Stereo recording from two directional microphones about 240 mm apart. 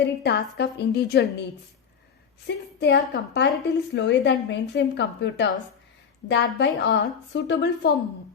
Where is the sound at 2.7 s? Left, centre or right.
Left.